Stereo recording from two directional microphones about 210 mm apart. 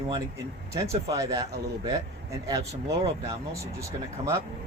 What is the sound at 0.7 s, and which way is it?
Speech, 15° right (ahead or behind).